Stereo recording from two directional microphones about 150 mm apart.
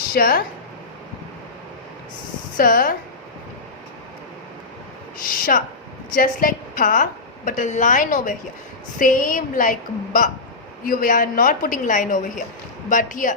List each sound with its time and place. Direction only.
0.1 s speech: 75° left (ahead or behind)
2.6 s speech: 70° left (ahead or behind)
5.2 s a woman's voice: 65° left (ahead or behind)